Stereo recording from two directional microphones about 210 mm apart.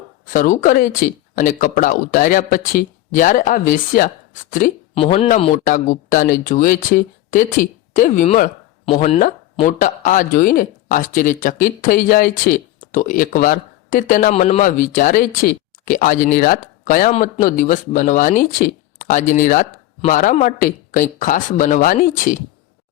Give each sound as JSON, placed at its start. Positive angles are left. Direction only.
{"t": 0.3, "sound": "speech", "side_deg": 40}
{"t": 4.9, "sound": "speech", "side_deg": 25}
{"t": 5.6, "sound": "speech", "side_deg": 40}